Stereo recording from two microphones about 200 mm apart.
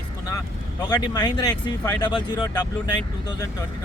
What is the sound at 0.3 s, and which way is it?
Speech, 20° left (ahead or behind).